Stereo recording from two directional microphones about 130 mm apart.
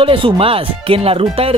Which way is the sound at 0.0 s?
40° right (ahead or behind).